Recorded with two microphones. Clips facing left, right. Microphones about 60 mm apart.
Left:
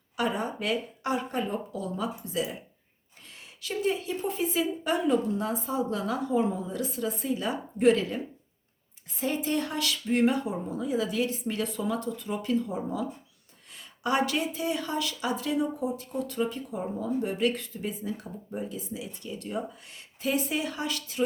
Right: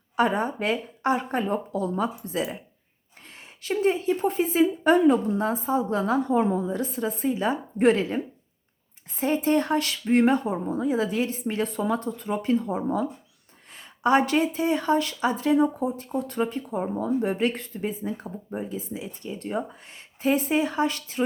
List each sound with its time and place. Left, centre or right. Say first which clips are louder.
0.2 s speech: right 6 dB; right
3.6 s speech: right 5 dB; right
9.2 s speech: right 6 dB; right